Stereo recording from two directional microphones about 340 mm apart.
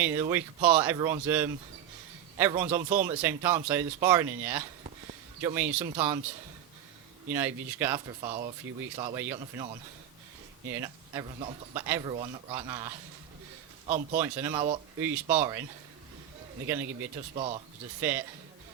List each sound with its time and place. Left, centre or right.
0.0 s speech: centre
7.3 s speech: centre
8.2 s speech: centre
10.7 s speech: centre
13.8 s speech: right
14.2 s speech: centre
16.6 s speech: centre
17.3 s speech: centre
18.0 s speech: centre